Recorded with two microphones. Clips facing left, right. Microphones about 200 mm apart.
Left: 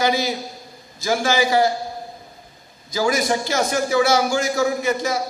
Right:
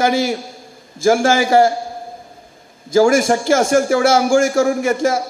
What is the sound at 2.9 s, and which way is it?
A man's voice, 45° right (ahead or behind).